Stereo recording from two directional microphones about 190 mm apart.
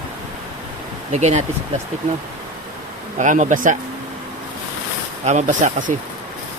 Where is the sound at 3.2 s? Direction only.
40° right (ahead or behind).